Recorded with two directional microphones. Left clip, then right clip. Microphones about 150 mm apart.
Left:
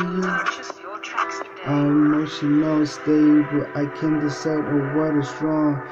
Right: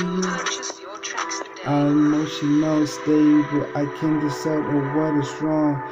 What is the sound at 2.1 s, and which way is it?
Mantra, 25° left (ahead or behind).